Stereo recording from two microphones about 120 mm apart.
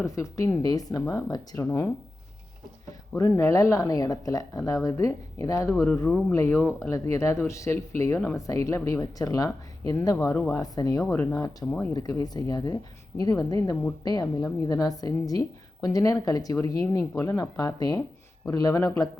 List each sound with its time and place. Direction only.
0.0 s speech: 25° left (ahead or behind)
3.1 s speech: 20° left (ahead or behind)
10.6 s a woman's voice: 30° left (ahead or behind)
11.1 s a woman's voice: 20° left (ahead or behind)